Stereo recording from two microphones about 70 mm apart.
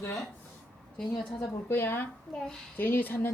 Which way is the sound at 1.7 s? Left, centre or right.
Left.